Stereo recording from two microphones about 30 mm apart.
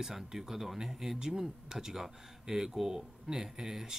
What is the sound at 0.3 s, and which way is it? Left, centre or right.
Speech, centre.